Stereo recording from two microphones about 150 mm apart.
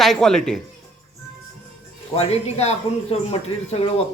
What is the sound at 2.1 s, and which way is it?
Speech, 45° left (ahead or behind).